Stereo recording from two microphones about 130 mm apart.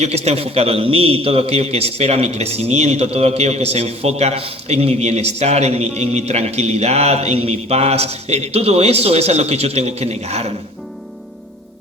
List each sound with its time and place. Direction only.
0.0 s a man's voice: 55° right (ahead or behind)